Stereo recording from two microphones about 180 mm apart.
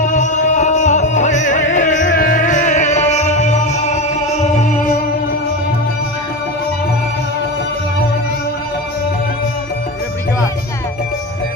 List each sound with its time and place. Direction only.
0.0 s music: 45° left (ahead or behind)